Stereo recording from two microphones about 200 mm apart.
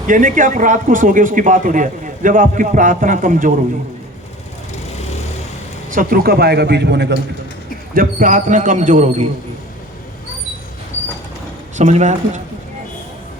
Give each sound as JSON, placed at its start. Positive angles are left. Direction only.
{"t": 0.1, "sound": "a man's voice", "side_deg": -40}
{"t": 5.9, "sound": "a man's voice", "side_deg": -45}
{"t": 7.9, "sound": "a man's voice", "side_deg": -40}
{"t": 11.8, "sound": "a man's voice", "side_deg": -35}